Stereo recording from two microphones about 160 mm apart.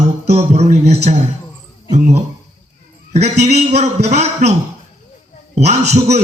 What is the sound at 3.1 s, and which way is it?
A man's voice, 45° right (ahead or behind).